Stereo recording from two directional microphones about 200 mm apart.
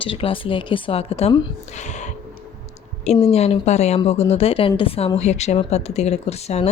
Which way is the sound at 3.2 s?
30° left (ahead or behind).